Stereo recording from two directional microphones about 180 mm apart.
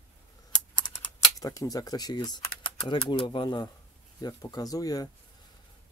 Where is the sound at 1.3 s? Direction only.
20° left (ahead or behind).